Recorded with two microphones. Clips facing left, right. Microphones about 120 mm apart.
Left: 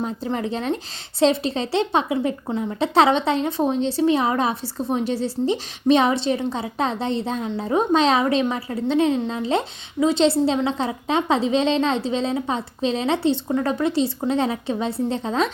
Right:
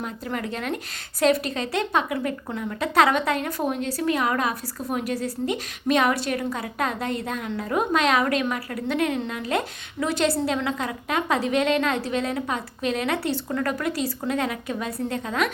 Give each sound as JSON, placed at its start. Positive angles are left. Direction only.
{"t": 0.0, "sound": "speech", "side_deg": 25}